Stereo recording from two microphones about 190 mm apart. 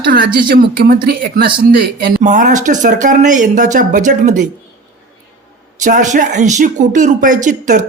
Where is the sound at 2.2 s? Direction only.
40° right (ahead or behind).